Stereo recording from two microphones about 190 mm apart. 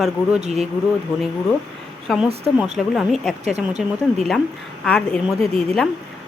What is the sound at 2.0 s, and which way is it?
Speech, 5° right (ahead or behind).